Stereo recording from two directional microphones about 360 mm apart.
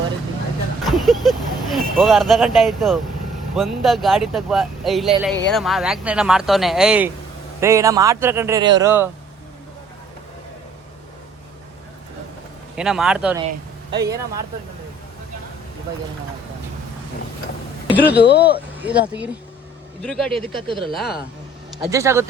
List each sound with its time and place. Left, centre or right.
0.9 s speech: centre
12.7 s speech: centre
13.5 s a sound: centre
17.9 s speech: centre
18.2 s a man's voice: left
18.8 s speech: centre
20.4 s speech: centre
20.9 s speech: centre